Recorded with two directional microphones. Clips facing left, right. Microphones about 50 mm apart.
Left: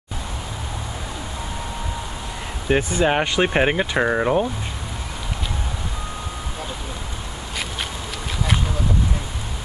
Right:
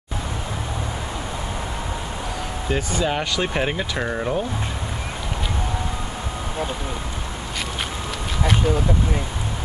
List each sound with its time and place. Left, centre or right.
2.7 s speech: left